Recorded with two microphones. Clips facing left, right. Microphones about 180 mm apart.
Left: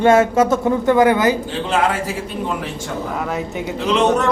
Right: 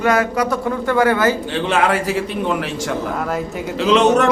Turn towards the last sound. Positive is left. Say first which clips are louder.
# right 3 dB
turn(degrees=-80)